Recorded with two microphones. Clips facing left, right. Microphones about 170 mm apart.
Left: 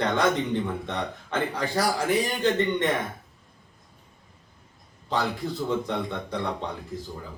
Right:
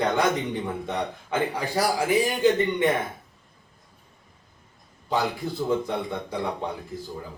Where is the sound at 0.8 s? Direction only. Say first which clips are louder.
Right 2 dB; 10° right (ahead or behind).